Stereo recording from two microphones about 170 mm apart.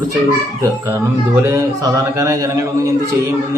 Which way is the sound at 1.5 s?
20° right (ahead or behind).